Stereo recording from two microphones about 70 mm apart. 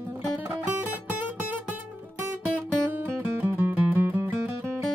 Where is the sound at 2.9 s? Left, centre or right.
Right.